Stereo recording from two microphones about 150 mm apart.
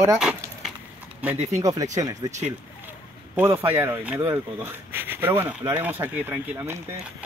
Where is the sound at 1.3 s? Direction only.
45° right (ahead or behind).